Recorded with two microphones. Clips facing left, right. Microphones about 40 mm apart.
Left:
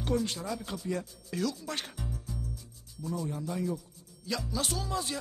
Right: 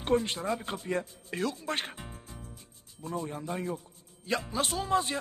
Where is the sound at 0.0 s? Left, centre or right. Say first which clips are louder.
Right 3 dB; right.